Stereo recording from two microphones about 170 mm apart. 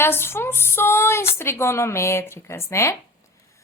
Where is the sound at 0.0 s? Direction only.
15° left (ahead or behind).